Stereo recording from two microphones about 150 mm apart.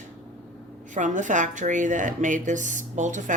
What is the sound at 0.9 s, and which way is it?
A woman's voice, 55° right (ahead or behind).